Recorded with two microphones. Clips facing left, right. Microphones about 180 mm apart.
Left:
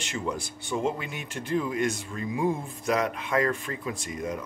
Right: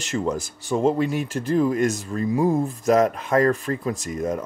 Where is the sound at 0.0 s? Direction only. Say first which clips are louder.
Right 7 dB; 40° right (ahead or behind).